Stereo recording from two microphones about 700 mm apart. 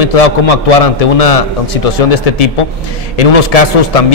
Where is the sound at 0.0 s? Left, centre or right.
Left.